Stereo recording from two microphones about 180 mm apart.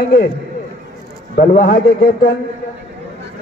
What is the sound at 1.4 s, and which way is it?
Speech, 65° left (ahead or behind).